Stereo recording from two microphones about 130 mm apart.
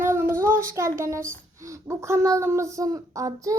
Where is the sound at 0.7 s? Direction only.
20° right (ahead or behind).